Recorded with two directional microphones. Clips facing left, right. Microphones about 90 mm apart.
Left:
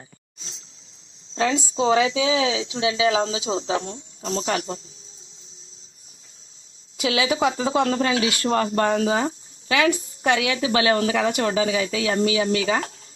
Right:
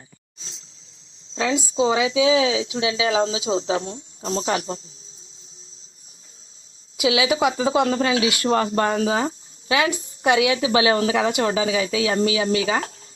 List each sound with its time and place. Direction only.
1.5 s speech: 5° right (ahead or behind)
4.2 s speech: 30° right (ahead or behind)
6.9 s a woman's voice: 10° right (ahead or behind)